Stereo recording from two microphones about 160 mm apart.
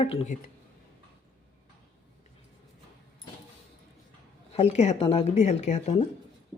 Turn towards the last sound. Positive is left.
turn(degrees=45)  # may be behind; listen again after turning